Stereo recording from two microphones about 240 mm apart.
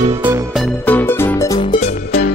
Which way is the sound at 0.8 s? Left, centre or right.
Centre.